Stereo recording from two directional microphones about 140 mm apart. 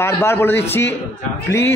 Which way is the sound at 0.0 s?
15° left (ahead or behind).